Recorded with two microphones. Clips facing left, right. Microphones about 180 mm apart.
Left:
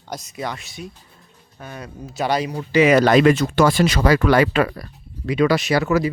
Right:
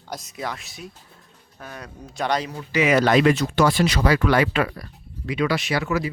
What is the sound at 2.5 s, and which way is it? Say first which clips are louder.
Speech: left 6 dB; 35° left (ahead or behind).